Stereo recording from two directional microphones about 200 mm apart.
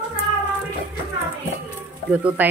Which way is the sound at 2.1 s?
5° right (ahead or behind).